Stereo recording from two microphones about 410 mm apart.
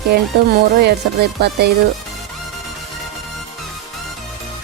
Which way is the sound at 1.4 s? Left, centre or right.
Right.